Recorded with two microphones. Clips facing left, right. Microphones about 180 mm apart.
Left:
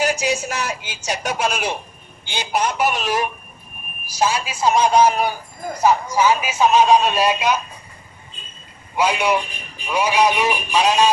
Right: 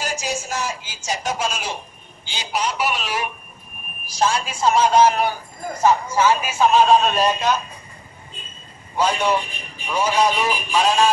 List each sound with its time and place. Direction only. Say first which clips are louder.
0.0 s speech: left 6 dB; 65° left (ahead or behind); by 3.3 s 45° left (ahead or behind)
4.1 s a man's voice: even; 5° left (ahead or behind)
8.9 s a man's voice: left 1 dB; 10° left (ahead or behind)